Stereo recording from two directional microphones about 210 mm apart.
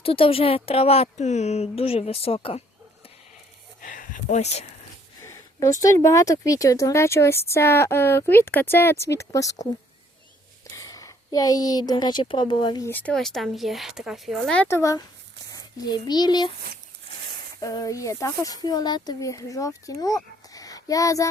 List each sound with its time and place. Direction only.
0.0 s a woman's voice: 25° left (ahead or behind)
3.8 s a sound: 40° left (ahead or behind)
5.2 s speech: 15° left (ahead or behind)
10.8 s speech: 15° left (ahead or behind)
17.6 s speech: 15° left (ahead or behind)